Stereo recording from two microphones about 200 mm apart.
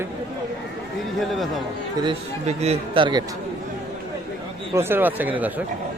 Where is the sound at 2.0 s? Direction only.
30° right (ahead or behind).